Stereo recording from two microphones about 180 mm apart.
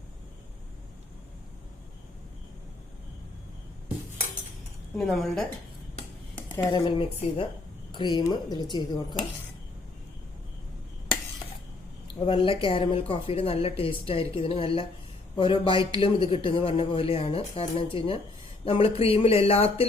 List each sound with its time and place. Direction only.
4.9 s a woman's voice: centre (ahead or behind)
6.8 s a man's voice: 30° left (ahead or behind)
12.2 s a man's voice: 30° left (ahead or behind)